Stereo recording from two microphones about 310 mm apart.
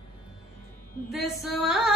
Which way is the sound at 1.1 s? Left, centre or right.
Centre.